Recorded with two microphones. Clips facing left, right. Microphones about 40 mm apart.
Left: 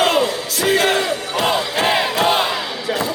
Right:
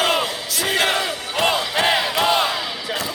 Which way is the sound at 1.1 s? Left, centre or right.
Right.